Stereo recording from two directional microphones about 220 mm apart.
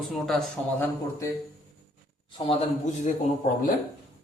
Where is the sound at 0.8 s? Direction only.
15° left (ahead or behind); by 3.1 s 30° left (ahead or behind).